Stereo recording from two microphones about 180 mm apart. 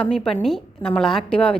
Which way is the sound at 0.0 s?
Centre (ahead or behind).